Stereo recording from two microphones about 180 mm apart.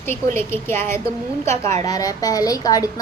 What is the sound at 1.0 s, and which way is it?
Speech, 35° right (ahead or behind).